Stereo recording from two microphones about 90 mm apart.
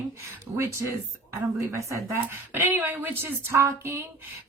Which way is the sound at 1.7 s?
30° right (ahead or behind).